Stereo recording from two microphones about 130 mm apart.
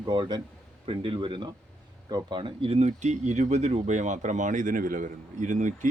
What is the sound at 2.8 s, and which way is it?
Speech, 60° right (ahead or behind).